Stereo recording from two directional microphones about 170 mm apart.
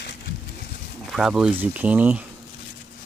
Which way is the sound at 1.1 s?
5° right (ahead or behind).